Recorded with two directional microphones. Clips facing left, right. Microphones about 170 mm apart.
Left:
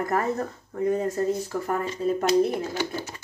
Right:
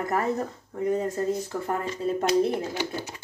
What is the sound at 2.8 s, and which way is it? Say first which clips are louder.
Speech: left 1 dB; 15° right (ahead or behind).